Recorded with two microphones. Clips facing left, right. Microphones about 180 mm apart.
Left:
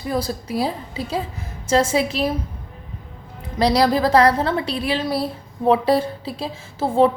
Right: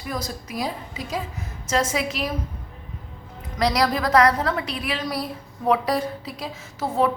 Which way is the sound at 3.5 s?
30° left (ahead or behind).